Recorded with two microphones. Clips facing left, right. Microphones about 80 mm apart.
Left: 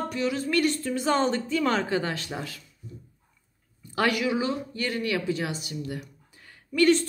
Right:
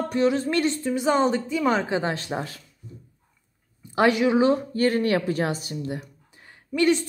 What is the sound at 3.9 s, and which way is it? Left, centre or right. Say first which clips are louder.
Speech: right 6 dB; right.